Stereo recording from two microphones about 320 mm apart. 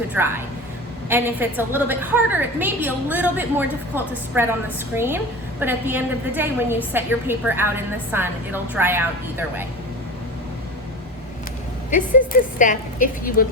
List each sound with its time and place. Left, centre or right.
0.1 s a woman's voice: centre
11.9 s a woman's voice: left